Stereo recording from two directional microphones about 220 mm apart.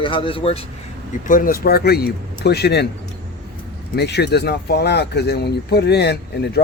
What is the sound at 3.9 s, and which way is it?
Speech, 50° left (ahead or behind).